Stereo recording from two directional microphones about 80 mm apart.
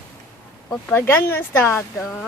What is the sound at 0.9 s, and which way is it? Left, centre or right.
Speech, left.